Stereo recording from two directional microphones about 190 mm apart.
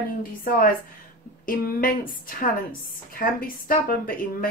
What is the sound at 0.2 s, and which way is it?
A woman's voice, 45° left (ahead or behind).